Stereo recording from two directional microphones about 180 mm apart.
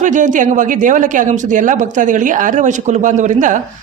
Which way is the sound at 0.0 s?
45° right (ahead or behind).